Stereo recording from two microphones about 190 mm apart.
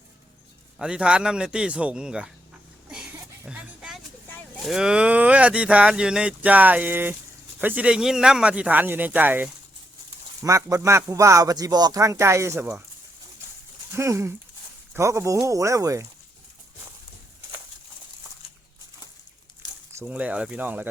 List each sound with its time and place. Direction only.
0.8 s speech: 5° right (ahead or behind)
2.9 s a sound: 5° right (ahead or behind)
4.3 s cattle: 10° left (ahead or behind)
4.7 s speech: 5° right (ahead or behind)
13.9 s speech: 15° right (ahead or behind)
19.9 s speech: 10° right (ahead or behind)